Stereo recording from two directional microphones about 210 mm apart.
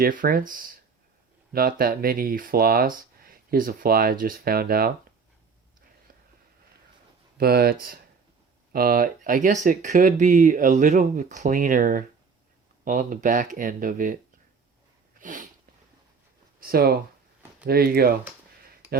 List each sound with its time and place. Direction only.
0.0 s speech: 40° right (ahead or behind)
7.3 s speech: 45° right (ahead or behind)
15.2 s a sound: 40° right (ahead or behind)
16.6 s speech: 45° right (ahead or behind)